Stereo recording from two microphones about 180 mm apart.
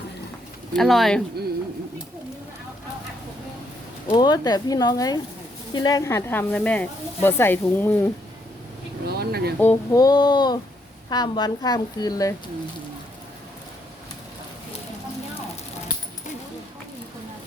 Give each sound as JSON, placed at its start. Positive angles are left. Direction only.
{"t": 0.7, "sound": "speech", "side_deg": 0}
{"t": 4.1, "sound": "a woman's voice", "side_deg": 25}
{"t": 9.0, "sound": "speech", "side_deg": -60}
{"t": 9.6, "sound": "a woman's voice", "side_deg": 15}